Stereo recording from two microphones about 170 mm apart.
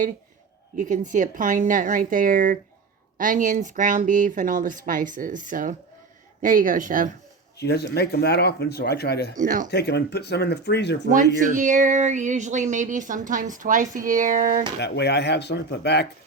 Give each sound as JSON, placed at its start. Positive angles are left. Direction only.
{"t": 0.8, "sound": "speech", "side_deg": -50}
{"t": 7.6, "sound": "speech", "side_deg": 75}
{"t": 9.4, "sound": "speech", "side_deg": -50}
{"t": 9.6, "sound": "speech", "side_deg": 80}
{"t": 11.4, "sound": "speech", "side_deg": -50}
{"t": 14.8, "sound": "speech", "side_deg": 85}